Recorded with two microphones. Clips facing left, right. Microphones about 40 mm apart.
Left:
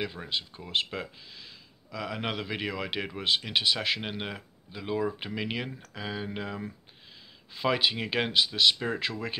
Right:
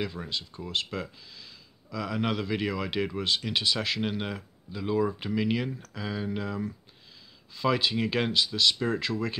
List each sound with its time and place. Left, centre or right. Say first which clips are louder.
0.1 s speech: left 1 dB; left